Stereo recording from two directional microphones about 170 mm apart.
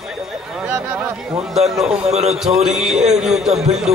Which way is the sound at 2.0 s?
40° right (ahead or behind).